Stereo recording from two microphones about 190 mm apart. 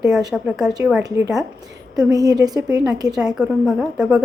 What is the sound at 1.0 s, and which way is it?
A woman's voice, 15° right (ahead or behind).